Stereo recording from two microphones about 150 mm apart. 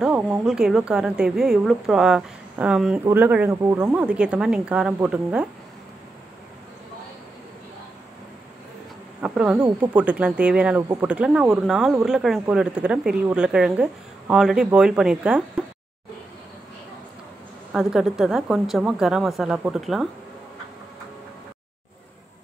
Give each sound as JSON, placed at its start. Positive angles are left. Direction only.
{"t": 0.0, "sound": "a woman's voice", "side_deg": -5}
{"t": 9.2, "sound": "a woman's voice", "side_deg": -5}
{"t": 17.7, "sound": "a woman's voice", "side_deg": -5}